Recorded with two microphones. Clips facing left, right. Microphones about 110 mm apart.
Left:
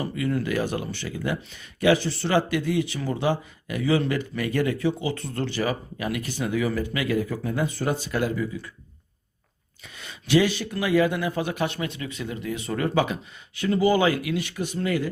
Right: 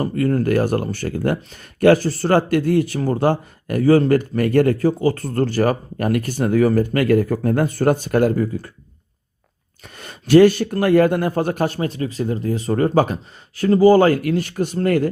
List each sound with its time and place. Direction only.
0.0 s speech: 45° right (ahead or behind)
9.8 s speech: 50° right (ahead or behind)